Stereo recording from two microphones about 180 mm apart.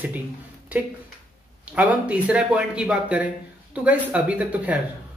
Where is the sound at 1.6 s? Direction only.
5° right (ahead or behind).